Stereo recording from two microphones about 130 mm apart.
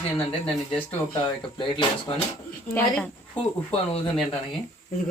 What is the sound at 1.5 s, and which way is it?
Speech, 40° left (ahead or behind).